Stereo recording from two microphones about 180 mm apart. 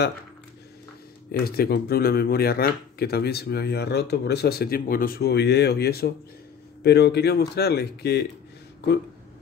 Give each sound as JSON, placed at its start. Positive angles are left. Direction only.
{"t": 1.4, "sound": "speech", "side_deg": 60}